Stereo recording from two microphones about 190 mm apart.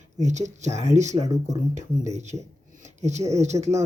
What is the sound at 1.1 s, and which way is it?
Speech, 20° right (ahead or behind).